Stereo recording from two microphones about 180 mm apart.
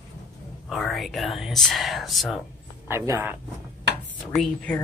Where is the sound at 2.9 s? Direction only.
15° right (ahead or behind).